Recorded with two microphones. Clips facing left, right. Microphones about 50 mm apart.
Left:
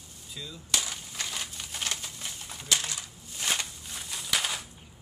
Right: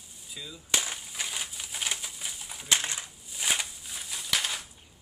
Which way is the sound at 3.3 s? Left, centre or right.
Centre.